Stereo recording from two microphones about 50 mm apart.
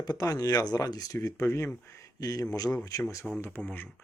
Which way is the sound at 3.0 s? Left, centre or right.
Left.